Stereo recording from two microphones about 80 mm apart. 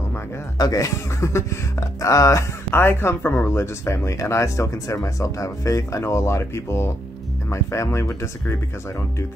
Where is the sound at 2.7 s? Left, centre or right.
Left.